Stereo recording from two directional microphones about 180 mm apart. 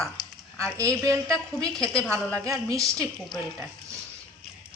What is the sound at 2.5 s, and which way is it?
Speech, 20° right (ahead or behind).